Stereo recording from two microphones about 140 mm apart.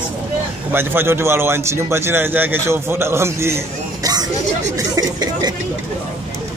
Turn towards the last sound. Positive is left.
turn(degrees=-25)  # may be behind; listen again after turning